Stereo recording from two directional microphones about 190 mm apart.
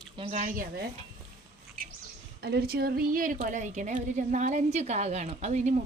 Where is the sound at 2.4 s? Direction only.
55° right (ahead or behind).